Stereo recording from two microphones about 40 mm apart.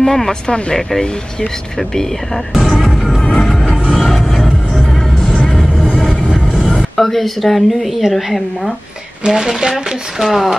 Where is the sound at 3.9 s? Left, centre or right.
Centre.